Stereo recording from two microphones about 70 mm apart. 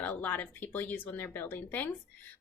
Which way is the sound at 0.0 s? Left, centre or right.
Left.